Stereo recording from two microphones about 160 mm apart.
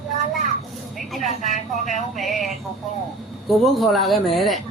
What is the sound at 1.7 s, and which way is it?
Music, 50° left (ahead or behind).